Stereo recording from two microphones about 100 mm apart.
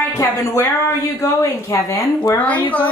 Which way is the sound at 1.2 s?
35° left (ahead or behind).